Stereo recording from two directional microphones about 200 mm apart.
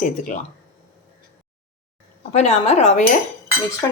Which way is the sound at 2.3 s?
35° left (ahead or behind).